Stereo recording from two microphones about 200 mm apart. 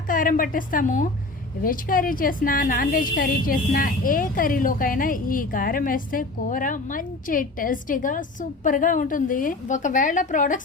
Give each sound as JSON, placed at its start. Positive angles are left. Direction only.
{"t": 0.1, "sound": "a woman's voice", "side_deg": 45}